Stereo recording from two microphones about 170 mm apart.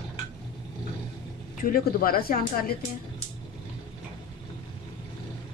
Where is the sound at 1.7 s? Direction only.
60° left (ahead or behind).